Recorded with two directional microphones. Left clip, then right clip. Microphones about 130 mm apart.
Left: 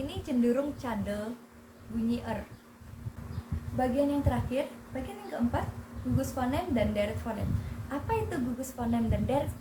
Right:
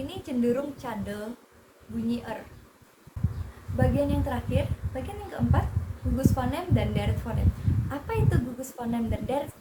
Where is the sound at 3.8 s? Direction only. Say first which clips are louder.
Right 1 dB; 20° right (ahead or behind).